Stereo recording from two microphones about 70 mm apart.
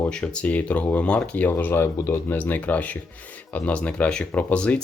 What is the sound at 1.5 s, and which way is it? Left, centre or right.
Speech, left.